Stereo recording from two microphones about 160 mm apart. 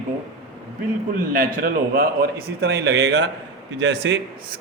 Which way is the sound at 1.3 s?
65° right (ahead or behind).